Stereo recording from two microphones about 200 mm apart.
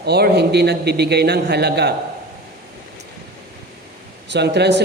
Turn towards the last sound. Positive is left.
turn(degrees=-60)  # may be behind; listen again after turning